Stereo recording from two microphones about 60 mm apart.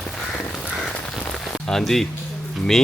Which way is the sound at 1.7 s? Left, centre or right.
Centre.